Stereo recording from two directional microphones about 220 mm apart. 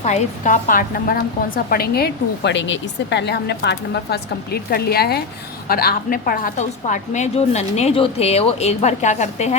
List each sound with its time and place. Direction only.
0.0 s a woman's voice: 35° left (ahead or behind)